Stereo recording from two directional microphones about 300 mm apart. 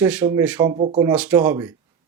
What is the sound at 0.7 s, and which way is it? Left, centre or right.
Speech, right.